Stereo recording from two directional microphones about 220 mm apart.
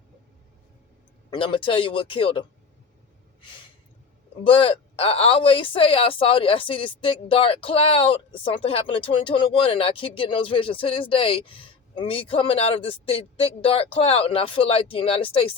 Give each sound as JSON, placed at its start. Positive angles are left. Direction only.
{"t": 1.3, "sound": "speech", "side_deg": 20}
{"t": 4.4, "sound": "speech", "side_deg": 25}